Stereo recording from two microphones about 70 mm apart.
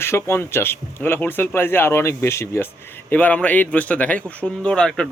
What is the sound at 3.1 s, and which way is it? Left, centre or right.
Speech, left.